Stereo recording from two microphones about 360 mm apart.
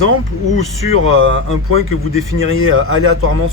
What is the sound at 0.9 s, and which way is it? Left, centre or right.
Speech, right.